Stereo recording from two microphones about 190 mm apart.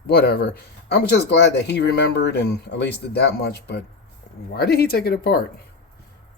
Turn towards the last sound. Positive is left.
turn(degrees=55)  # may be behind; listen again after turning